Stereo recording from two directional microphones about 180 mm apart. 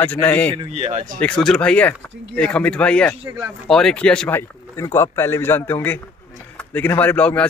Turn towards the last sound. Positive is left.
turn(degrees=5)  # may be behind; listen again after turning